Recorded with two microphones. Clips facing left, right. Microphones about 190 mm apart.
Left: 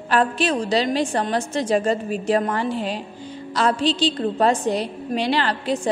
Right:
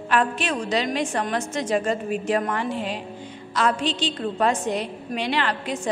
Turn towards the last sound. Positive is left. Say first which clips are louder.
# left 3 dB
turn(degrees=35)  # may be behind; listen again after turning